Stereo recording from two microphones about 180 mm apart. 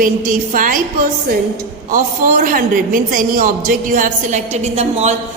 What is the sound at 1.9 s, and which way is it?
A woman's voice, 50° right (ahead or behind).